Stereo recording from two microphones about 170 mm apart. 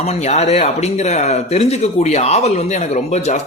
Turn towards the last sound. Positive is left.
turn(degrees=45)  # may be behind; listen again after turning